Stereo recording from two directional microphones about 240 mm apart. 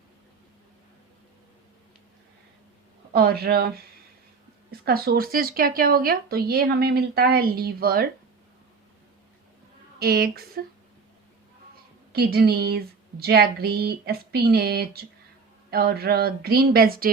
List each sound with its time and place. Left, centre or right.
3.1 s speech: right
4.9 s speech: right
10.0 s speech: right
12.1 s speech: right